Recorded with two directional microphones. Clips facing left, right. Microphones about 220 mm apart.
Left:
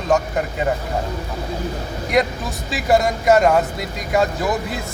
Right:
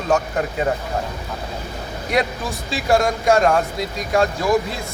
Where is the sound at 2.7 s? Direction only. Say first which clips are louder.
Left 1 dB; 5° left (ahead or behind).